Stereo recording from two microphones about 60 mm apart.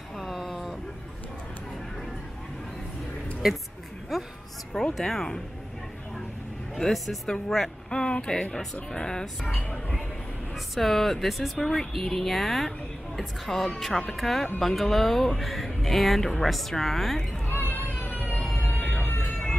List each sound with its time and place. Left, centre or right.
0.2 s a sound: centre
4.1 s speech: centre
6.7 s speech: centre
10.5 s speech: centre
17.5 s a sound: left
18.4 s vehicle: left